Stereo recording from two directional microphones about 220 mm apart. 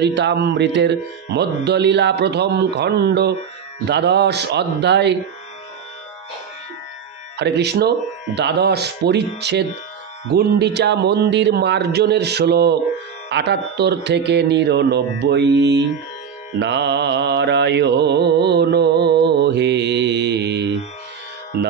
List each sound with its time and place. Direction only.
0.0 s mantra: 50° right (ahead or behind)
7.3 s mantra: 50° right (ahead or behind)